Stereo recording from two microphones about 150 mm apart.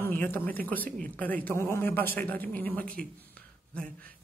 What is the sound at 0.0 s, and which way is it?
Speech, 15° left (ahead or behind).